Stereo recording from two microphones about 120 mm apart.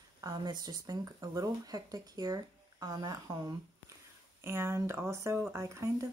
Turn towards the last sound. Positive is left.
turn(degrees=-25)  # may be behind; listen again after turning